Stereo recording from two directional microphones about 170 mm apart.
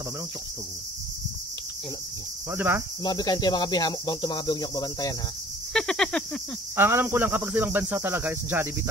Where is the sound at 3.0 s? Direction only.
25° left (ahead or behind).